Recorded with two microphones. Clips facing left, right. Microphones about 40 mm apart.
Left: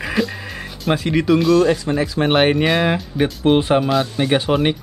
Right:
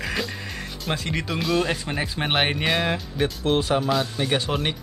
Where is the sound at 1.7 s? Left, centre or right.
Centre.